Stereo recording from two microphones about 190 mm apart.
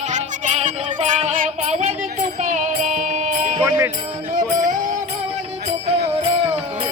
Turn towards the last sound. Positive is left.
turn(degrees=-30)  # may be behind; listen again after turning